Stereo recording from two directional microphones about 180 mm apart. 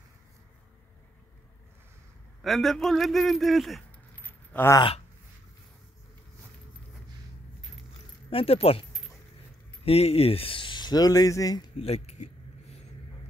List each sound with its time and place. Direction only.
2.4 s a man's voice: centre (ahead or behind)
4.1 s keys jangling: 10° left (ahead or behind)
4.7 s a sound: 30° left (ahead or behind)
8.3 s speech: 30° left (ahead or behind)
9.8 s speech: 35° left (ahead or behind)